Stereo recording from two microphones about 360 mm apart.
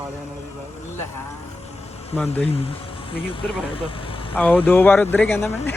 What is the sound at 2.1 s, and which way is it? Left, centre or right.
Speech, centre.